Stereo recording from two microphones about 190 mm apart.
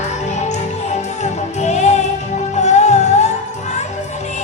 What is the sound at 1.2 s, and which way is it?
Music, 35° left (ahead or behind).